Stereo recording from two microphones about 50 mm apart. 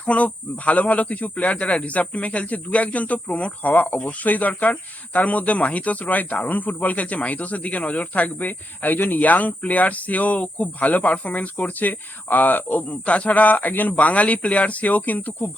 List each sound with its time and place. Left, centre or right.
0.0 s speech: left